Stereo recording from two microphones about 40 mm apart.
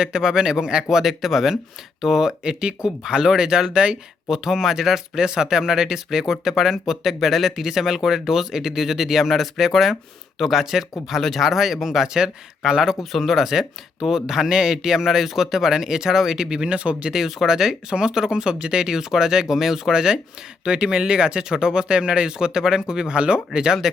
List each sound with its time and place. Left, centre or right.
0.0 s speech: centre
4.3 s speech: centre
11.2 s speech: centre
11.4 s speech: centre
13.0 s speech: centre; by 17.1 s right
17.1 s speech: centre; by 23.4 s right
23.8 s speech: centre